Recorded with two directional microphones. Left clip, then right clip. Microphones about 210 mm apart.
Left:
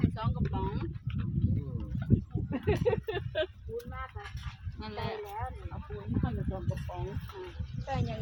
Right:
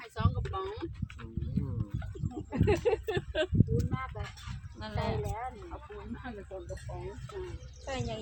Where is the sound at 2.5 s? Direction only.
50° right (ahead or behind).